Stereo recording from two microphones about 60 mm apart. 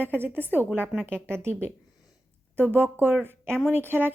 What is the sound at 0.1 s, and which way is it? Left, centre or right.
Speech, right.